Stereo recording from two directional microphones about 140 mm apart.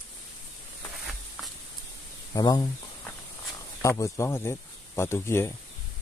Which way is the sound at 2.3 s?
25° left (ahead or behind).